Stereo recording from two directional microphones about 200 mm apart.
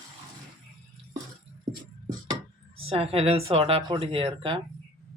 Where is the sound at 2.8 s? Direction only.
30° right (ahead or behind).